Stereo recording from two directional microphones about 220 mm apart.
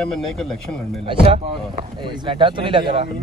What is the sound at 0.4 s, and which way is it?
Speech, centre (ahead or behind).